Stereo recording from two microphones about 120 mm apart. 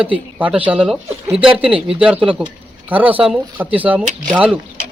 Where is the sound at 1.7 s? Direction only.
50° right (ahead or behind).